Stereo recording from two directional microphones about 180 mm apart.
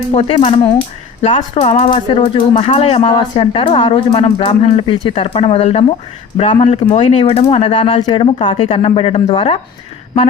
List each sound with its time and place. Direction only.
0.1 s speech: 30° left (ahead or behind)